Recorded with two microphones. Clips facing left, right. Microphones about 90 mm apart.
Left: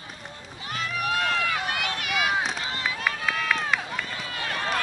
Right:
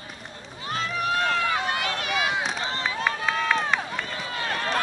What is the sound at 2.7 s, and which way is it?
Run, 30° right (ahead or behind).